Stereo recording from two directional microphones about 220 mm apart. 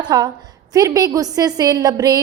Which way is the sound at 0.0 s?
20° right (ahead or behind).